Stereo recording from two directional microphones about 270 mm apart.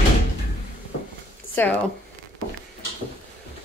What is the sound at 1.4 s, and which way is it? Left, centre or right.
Zipper, left.